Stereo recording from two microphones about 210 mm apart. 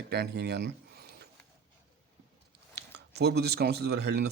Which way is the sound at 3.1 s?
50° right (ahead or behind).